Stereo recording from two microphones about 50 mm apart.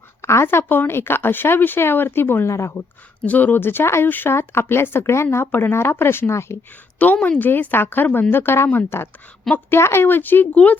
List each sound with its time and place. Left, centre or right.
0.2 s a sound: left
0.4 s speech: left
2.5 s speech: left
3.2 s a woman's voice: left
5.5 s speech: left
7.0 s a woman's voice: left
10.5 s speech: left